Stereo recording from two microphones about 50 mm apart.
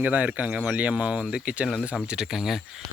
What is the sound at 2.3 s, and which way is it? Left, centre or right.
Speech, centre.